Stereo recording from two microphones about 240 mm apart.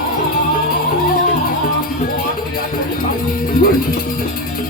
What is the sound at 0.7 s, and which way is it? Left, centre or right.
Music, left.